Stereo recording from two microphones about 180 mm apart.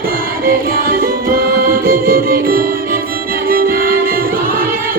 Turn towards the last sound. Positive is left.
turn(degrees=-55)  # may be behind; listen again after turning